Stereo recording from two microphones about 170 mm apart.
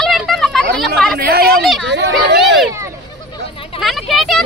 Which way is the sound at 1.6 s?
Centre (ahead or behind).